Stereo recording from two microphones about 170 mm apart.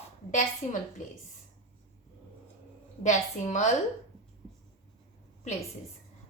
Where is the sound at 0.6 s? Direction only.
50° left (ahead or behind).